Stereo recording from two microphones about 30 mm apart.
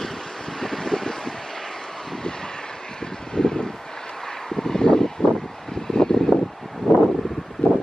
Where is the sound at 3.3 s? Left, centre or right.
Left.